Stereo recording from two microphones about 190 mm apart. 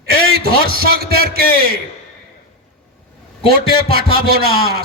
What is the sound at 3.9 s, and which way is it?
Speech, 55° right (ahead or behind).